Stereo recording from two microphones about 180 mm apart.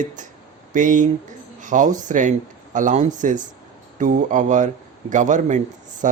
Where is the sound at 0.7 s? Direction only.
45° right (ahead or behind).